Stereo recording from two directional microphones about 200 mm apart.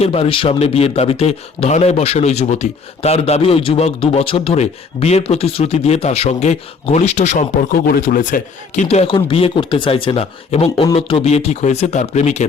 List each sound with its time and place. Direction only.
0.0 s speech: 30° left (ahead or behind)